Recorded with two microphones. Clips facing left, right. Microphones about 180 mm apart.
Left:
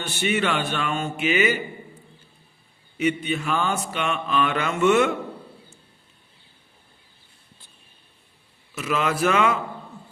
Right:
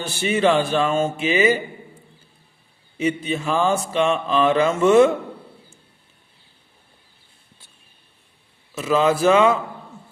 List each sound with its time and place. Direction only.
0.0 s mantra: 35° right (ahead or behind)
3.0 s mantra: 30° right (ahead or behind)
8.7 s speech: 30° right (ahead or behind)